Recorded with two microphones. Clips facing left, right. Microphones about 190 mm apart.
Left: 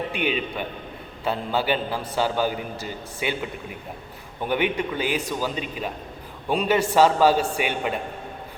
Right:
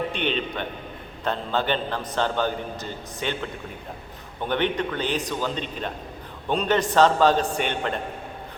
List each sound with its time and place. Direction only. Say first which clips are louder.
0.1 s a man's voice: left 1 dB; 5° left (ahead or behind)